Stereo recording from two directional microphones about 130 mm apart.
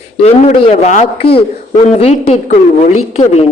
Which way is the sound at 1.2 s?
50° left (ahead or behind).